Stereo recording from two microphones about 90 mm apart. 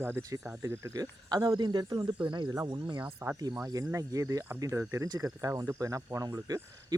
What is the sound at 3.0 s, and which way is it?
Speech, 20° right (ahead or behind).